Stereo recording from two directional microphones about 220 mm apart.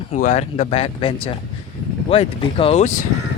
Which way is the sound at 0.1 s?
30° left (ahead or behind).